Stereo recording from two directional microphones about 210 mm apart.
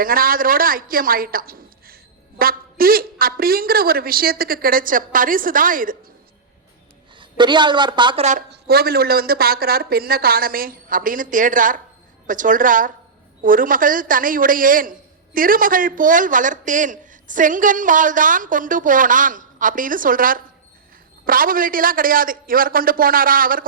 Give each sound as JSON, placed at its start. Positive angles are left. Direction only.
{"t": 0.0, "sound": "a woman's voice", "side_deg": -45}
{"t": 7.2, "sound": "a woman's voice", "side_deg": -20}
{"t": 8.4, "sound": "a woman's voice", "side_deg": -45}